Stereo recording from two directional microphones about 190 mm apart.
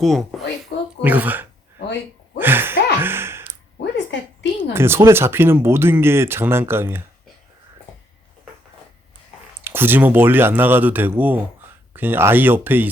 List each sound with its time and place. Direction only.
0.0 s a woman's voice: centre (ahead or behind)
0.7 s a sound: 60° left (ahead or behind)
1.0 s speech: 10° right (ahead or behind)
2.4 s gasp: 10° right (ahead or behind)
3.8 s a sound: 70° left (ahead or behind)
4.7 s speech: 10° right (ahead or behind)
9.6 s speech: 10° right (ahead or behind)